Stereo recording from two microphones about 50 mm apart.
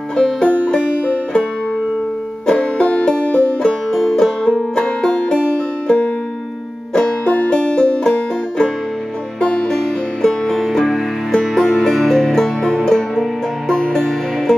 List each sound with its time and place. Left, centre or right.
0.1 s music: centre
2.4 s music: centre
10.9 s music: centre